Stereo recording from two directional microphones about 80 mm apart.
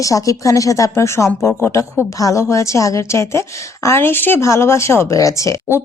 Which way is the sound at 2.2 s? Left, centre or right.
Left.